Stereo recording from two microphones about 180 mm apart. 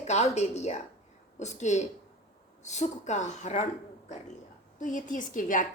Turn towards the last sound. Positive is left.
turn(degrees=45)  # may be behind; listen again after turning